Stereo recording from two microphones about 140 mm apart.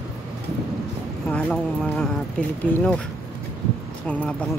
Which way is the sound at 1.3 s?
5° left (ahead or behind).